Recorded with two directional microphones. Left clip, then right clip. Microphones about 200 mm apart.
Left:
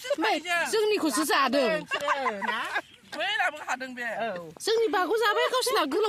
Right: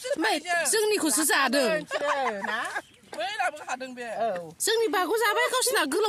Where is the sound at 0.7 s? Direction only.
5° left (ahead or behind).